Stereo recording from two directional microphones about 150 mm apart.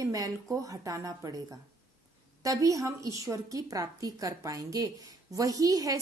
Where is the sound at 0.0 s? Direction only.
25° right (ahead or behind).